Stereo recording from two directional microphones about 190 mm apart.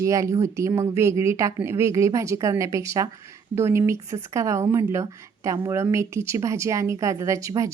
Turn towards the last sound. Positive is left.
turn(degrees=-15)  # may be behind; listen again after turning